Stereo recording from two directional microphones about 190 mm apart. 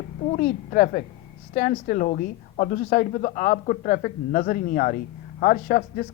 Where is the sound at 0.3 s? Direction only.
45° left (ahead or behind).